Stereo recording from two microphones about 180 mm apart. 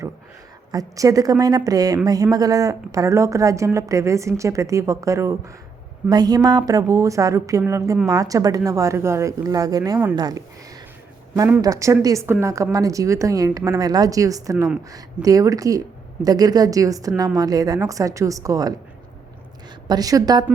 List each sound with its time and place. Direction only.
0.7 s a woman's voice: 20° right (ahead or behind)
11.3 s a woman's voice: 10° right (ahead or behind)
19.9 s a woman's voice: 20° right (ahead or behind)